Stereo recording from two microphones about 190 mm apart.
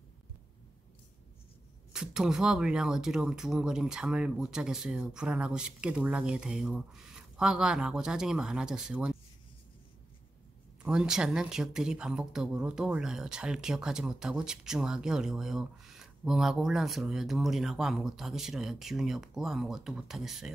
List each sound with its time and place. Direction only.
1.9 s speech: 5° right (ahead or behind)
10.8 s speech: 5° right (ahead or behind)